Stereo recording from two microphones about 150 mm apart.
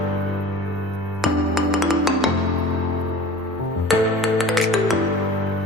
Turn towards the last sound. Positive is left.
turn(degrees=0)  # may be behind; listen again after turning